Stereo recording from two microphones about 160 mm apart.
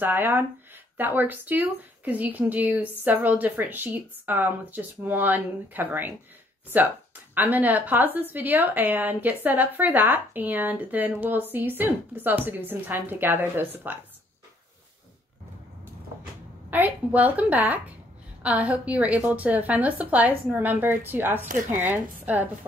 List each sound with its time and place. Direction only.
0.0 s a woman's voice: 10° right (ahead or behind)
7.3 s a woman's voice: 10° right (ahead or behind)
16.7 s a woman's voice: 10° right (ahead or behind)